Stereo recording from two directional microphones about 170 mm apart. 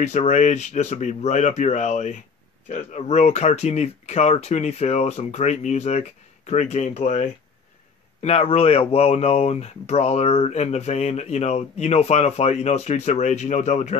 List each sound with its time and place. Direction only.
0.0 s speech: 45° left (ahead or behind)